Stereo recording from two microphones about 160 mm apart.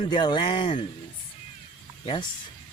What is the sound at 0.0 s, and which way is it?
Speech, 30° left (ahead or behind).